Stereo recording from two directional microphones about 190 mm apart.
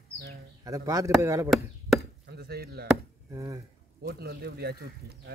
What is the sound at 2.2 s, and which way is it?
Speech, 55° right (ahead or behind).